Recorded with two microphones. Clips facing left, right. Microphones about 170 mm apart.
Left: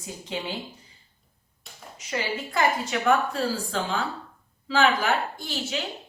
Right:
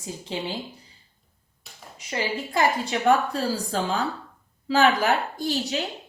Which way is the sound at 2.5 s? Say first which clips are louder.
Right 1 dB; 30° right (ahead or behind).